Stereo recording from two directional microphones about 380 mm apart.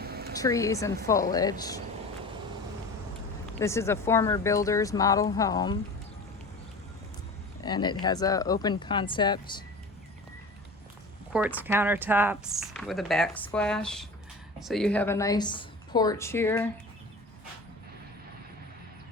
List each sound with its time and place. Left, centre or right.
0.0 s a sound: right
0.3 s speech: centre
3.6 s speech: centre
7.6 s speech: centre
11.3 s speech: centre